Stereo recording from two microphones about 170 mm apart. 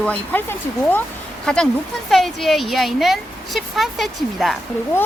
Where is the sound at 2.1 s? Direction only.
Centre (ahead or behind).